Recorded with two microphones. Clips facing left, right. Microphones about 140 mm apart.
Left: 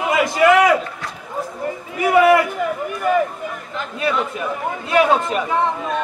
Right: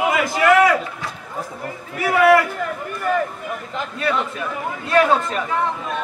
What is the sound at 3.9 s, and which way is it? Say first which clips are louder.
Speech: left 2 dB; 10° left (ahead or behind).